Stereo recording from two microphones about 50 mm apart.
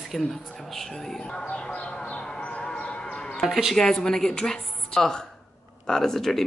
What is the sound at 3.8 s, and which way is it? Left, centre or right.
A woman's voice, centre.